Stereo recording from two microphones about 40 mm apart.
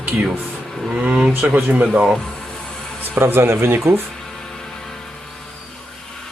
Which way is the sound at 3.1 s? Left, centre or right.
Right.